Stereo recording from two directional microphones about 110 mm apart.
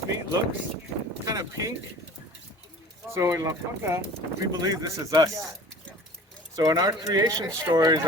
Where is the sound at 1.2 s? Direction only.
30° right (ahead or behind).